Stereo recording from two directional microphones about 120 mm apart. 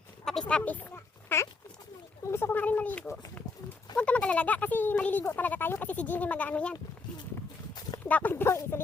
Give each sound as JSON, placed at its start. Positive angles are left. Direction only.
{"t": 0.3, "sound": "speech", "side_deg": 5}
{"t": 8.0, "sound": "speech", "side_deg": 15}